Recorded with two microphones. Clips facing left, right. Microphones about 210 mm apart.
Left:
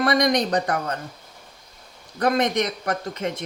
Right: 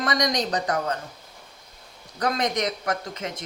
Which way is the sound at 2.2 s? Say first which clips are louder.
Left 4 dB; 55° left (ahead or behind).